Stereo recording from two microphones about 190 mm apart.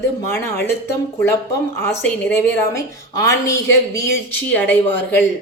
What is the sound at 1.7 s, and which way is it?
A woman's voice, 15° left (ahead or behind).